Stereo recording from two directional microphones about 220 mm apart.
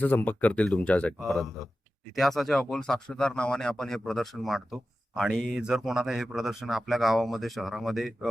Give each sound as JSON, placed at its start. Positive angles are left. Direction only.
{"t": 0.0, "sound": "speech", "side_deg": 10}